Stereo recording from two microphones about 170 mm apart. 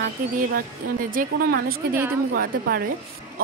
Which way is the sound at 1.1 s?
55° right (ahead or behind).